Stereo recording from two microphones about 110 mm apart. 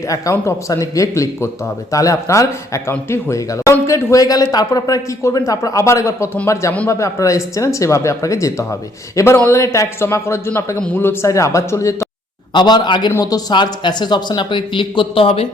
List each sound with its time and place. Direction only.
0.1 s speech: 30° left (ahead or behind)
12.5 s speech: 40° left (ahead or behind); by 15.4 s 60° left (ahead or behind)